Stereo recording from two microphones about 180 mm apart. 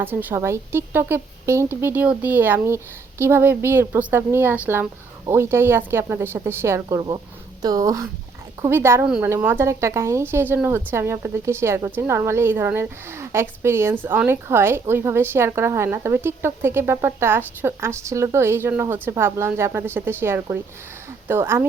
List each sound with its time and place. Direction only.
0.0 s a woman's voice: 10° right (ahead or behind)